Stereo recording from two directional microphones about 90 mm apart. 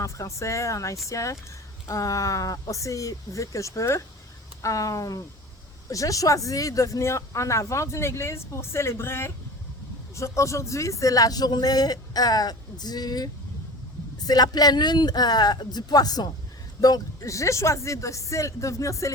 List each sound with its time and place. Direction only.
0.0 s speech: 35° left (ahead or behind)